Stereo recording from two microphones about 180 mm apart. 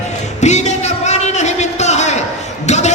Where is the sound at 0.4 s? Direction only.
40° left (ahead or behind).